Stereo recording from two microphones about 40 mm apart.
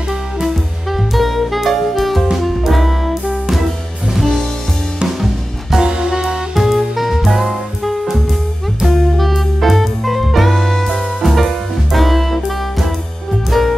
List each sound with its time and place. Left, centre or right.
0.9 s music: centre
5.9 s music: centre
6.5 s music: centre